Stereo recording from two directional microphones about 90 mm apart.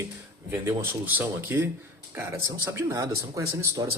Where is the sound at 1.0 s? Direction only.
20° right (ahead or behind).